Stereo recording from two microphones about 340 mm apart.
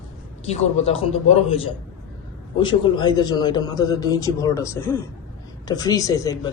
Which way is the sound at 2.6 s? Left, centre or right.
Centre.